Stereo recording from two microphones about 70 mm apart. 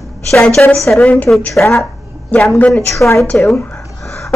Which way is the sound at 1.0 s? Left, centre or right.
Left.